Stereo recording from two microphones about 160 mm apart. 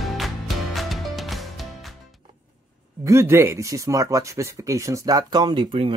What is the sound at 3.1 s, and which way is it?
Speech, 15° right (ahead or behind).